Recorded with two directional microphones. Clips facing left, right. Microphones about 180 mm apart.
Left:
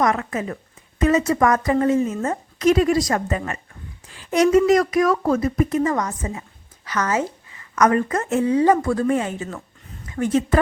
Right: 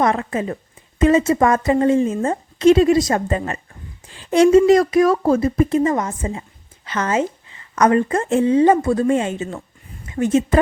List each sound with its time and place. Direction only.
0.0 s a woman's voice: 30° right (ahead or behind)